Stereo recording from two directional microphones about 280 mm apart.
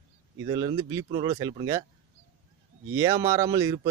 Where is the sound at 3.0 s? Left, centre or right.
Centre.